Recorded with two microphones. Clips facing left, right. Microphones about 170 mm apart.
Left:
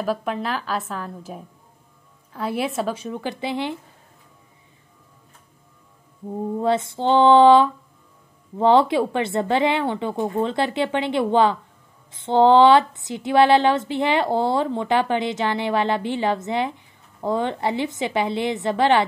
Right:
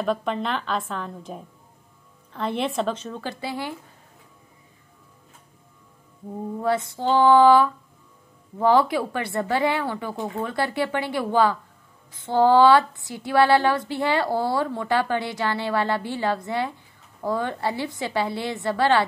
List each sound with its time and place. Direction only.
0.0 s a woman's voice: 5° left (ahead or behind); by 3.7 s 20° left (ahead or behind)
6.6 s speech: 25° left (ahead or behind)